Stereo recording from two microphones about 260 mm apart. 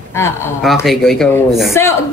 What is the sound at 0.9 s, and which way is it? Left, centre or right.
Speech, centre.